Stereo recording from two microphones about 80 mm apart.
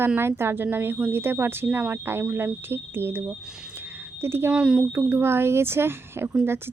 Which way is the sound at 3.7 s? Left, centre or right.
Right.